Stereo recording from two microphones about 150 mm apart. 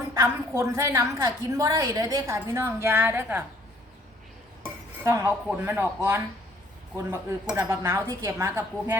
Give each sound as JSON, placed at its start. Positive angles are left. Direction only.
{"t": 0.1, "sound": "a woman's voice", "side_deg": -20}
{"t": 4.6, "sound": "cutlery", "side_deg": -20}
{"t": 5.5, "sound": "speech", "side_deg": -15}
{"t": 7.5, "sound": "speech", "side_deg": -20}